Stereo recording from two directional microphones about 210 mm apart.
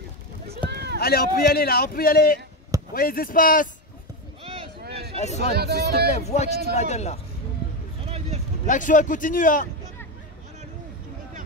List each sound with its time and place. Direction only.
0.7 s a sound: 55° right (ahead or behind)
0.9 s a man's voice: 45° left (ahead or behind)
4.4 s a sound: 30° right (ahead or behind)
5.1 s speech: 30° left (ahead or behind)
5.5 s speech: 50° right (ahead or behind)
6.1 s speech: 30° left (ahead or behind)
8.6 s speech: 40° left (ahead or behind)